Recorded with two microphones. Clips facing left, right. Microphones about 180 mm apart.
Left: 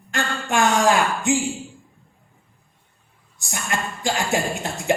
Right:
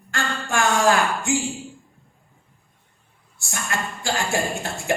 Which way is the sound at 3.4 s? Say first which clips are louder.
Left 1 dB; 20° left (ahead or behind).